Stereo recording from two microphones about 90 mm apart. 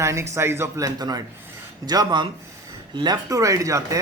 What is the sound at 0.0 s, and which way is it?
Speech, 30° right (ahead or behind).